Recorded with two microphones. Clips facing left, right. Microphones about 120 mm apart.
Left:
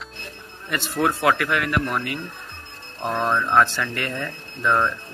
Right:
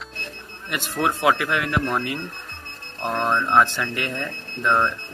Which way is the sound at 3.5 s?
15° right (ahead or behind).